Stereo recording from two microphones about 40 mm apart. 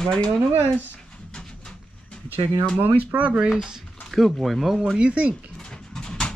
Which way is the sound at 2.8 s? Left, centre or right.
Right.